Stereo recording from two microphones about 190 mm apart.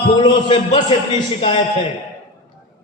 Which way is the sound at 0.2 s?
25° left (ahead or behind).